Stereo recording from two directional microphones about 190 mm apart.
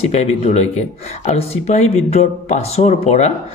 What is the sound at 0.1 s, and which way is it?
Speech, 35° left (ahead or behind).